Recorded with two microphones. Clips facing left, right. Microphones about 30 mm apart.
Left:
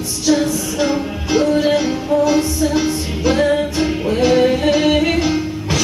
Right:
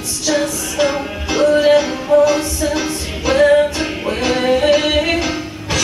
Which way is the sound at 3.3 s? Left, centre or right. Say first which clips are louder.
Right 5 dB; centre.